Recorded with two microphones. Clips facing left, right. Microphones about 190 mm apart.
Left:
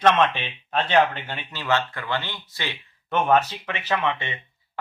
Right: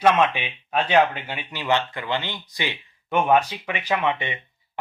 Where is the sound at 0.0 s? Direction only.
10° right (ahead or behind).